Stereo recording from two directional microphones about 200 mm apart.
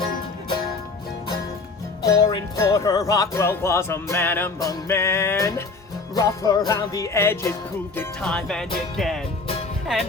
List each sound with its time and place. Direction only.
2.0 s speech: 20° left (ahead or behind)
6.1 s music: 20° left (ahead or behind)
6.7 s speech: 15° left (ahead or behind)
7.9 s music: 5° left (ahead or behind)